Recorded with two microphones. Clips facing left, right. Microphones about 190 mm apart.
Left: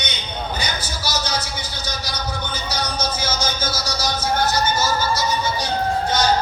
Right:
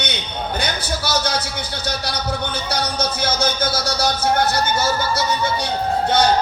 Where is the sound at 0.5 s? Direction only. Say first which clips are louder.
Right 4 dB; 60° right (ahead or behind).